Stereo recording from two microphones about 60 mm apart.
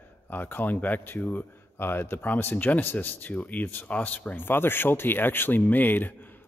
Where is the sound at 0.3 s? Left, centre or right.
Left.